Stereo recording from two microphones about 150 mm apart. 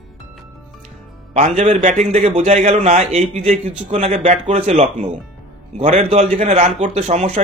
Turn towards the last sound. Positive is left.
turn(degrees=-45)  # may be behind; listen again after turning